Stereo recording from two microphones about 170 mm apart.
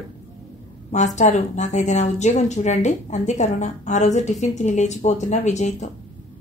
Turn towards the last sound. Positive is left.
turn(degrees=45)  # may be behind; listen again after turning